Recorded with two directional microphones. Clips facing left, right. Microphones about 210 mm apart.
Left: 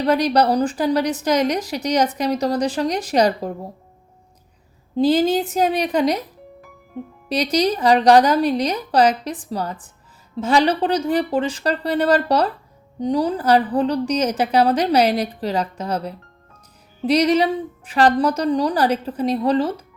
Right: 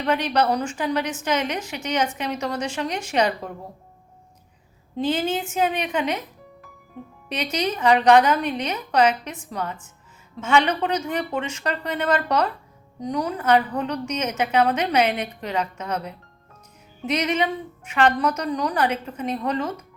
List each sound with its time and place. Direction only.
0.0 s a woman's voice: 35° left (ahead or behind)
4.9 s a woman's voice: 35° left (ahead or behind)
7.3 s a woman's voice: 35° left (ahead or behind)